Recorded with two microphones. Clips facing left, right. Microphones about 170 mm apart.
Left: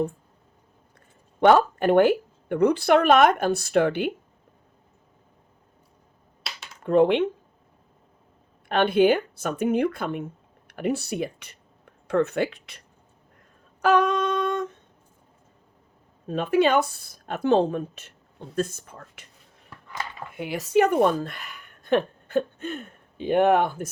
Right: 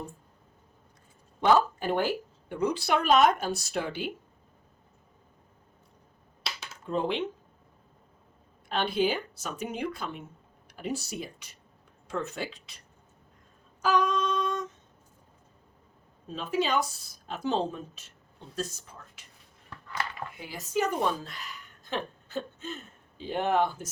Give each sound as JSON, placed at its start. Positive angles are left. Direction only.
{"t": 1.4, "sound": "a woman's voice", "side_deg": 65}
{"t": 6.8, "sound": "a woman's voice", "side_deg": 65}
{"t": 8.7, "sound": "a woman's voice", "side_deg": 60}
{"t": 13.8, "sound": "humming", "side_deg": 65}
{"t": 16.2, "sound": "a woman's voice", "side_deg": 60}
{"t": 20.4, "sound": "speech", "side_deg": 70}